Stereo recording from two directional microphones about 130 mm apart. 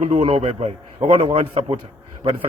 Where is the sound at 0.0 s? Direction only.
50° right (ahead or behind).